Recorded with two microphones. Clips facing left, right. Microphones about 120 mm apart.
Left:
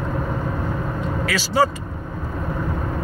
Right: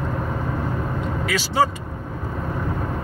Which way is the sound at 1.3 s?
20° right (ahead or behind).